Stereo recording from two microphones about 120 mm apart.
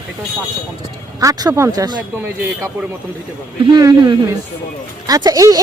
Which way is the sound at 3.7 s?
35° right (ahead or behind).